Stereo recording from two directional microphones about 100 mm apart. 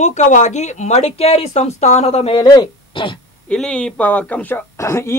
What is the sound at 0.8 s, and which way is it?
Speech, 90° left.